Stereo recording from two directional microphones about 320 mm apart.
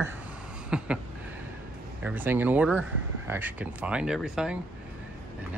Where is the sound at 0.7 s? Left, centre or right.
Centre.